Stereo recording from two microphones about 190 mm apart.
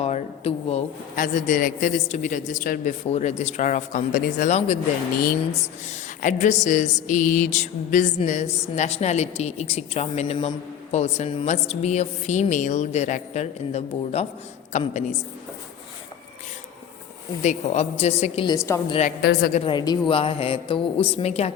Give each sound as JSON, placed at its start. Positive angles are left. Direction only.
{"t": 0.0, "sound": "a woman's voice", "side_deg": 35}
{"t": 5.9, "sound": "a woman's voice", "side_deg": 40}
{"t": 17.4, "sound": "a woman's voice", "side_deg": 35}
{"t": 18.5, "sound": "a woman's voice", "side_deg": 15}
{"t": 18.9, "sound": "a woman's voice", "side_deg": 35}
{"t": 19.2, "sound": "a woman's voice", "side_deg": 55}
{"t": 19.5, "sound": "a man's voice", "side_deg": 25}